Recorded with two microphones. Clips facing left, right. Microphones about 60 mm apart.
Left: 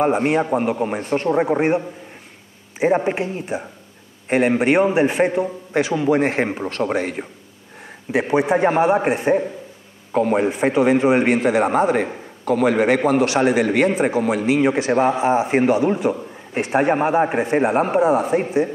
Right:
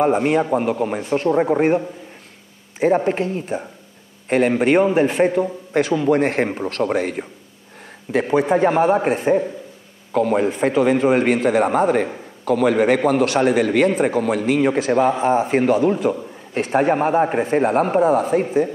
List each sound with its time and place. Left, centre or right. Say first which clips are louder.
0.0 s a man's voice: right 1 dB; centre